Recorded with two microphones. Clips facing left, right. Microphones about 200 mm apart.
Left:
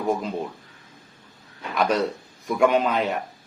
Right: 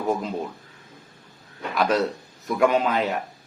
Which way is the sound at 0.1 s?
Centre (ahead or behind).